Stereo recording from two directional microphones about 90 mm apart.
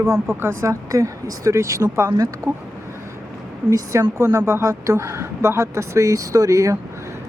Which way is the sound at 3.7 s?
35° right (ahead or behind).